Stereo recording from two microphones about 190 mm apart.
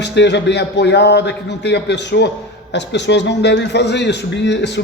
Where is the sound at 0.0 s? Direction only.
65° left (ahead or behind).